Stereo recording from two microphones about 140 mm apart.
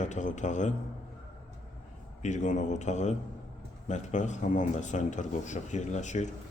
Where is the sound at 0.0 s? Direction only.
60° left (ahead or behind).